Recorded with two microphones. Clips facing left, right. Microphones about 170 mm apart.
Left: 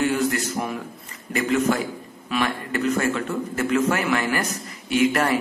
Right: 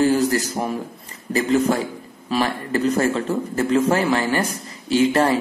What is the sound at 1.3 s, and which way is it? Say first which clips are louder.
A man's voice: right 3 dB; 30° right (ahead or behind).